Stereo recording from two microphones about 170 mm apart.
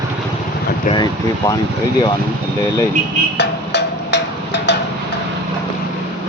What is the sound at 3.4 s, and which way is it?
Percussion, 85° left.